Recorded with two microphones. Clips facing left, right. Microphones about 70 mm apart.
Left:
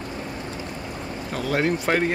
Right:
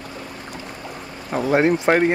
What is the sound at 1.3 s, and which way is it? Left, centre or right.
Speech, right.